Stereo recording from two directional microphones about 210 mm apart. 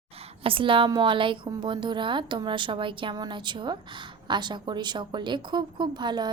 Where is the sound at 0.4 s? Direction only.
25° right (ahead or behind).